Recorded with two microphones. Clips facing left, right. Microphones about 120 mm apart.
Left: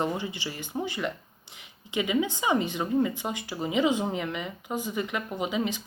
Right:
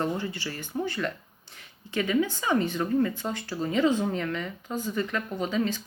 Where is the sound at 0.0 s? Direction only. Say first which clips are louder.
Even; 15° left (ahead or behind).